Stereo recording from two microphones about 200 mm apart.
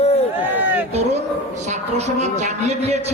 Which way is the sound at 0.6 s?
10° right (ahead or behind).